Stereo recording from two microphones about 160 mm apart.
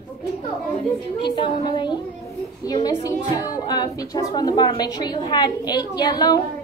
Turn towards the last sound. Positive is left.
turn(degrees=25)  # may be behind; listen again after turning